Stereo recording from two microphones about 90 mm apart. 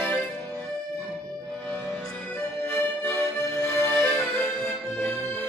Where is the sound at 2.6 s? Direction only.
20° left (ahead or behind).